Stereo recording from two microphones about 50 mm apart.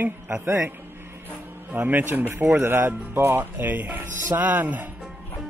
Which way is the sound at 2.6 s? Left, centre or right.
Right.